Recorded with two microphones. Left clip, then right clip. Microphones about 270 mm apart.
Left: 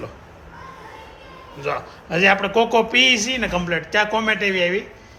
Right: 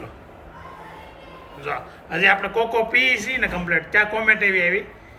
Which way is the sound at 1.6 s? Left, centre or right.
Centre.